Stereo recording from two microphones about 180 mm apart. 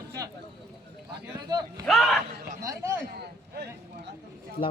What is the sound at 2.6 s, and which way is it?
Speech, 15° right (ahead or behind).